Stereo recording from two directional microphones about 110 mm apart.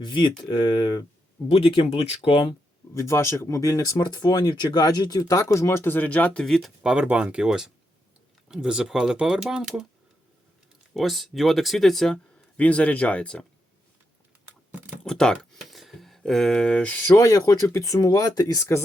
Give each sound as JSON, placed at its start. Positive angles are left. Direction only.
{"t": 0.0, "sound": "speech", "side_deg": 45}
{"t": 1.5, "sound": "speech", "side_deg": 55}
{"t": 2.3, "sound": "speech", "side_deg": 40}
{"t": 2.9, "sound": "speech", "side_deg": 30}
{"t": 6.8, "sound": "speech", "side_deg": -10}
{"t": 10.9, "sound": "speech", "side_deg": 0}
{"t": 15.0, "sound": "speech", "side_deg": 5}
{"t": 17.2, "sound": "speech", "side_deg": 30}